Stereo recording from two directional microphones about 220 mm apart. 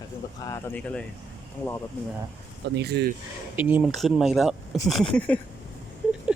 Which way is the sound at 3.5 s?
10° right (ahead or behind).